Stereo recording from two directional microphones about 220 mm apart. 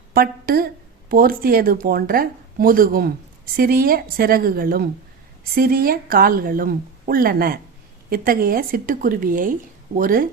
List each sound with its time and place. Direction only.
0.1 s speech: 40° right (ahead or behind)